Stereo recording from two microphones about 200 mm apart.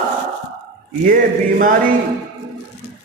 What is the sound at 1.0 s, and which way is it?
Speech, 45° right (ahead or behind).